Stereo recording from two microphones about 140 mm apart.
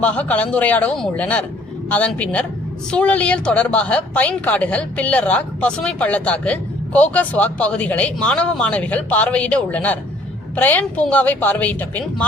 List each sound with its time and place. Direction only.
0.0 s a woman's voice: 10° left (ahead or behind)